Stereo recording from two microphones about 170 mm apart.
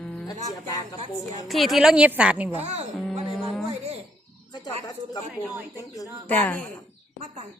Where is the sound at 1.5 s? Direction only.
Centre (ahead or behind).